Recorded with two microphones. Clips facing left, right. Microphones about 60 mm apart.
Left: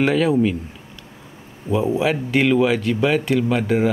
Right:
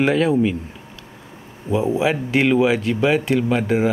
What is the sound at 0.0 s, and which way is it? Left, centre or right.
Speech, centre.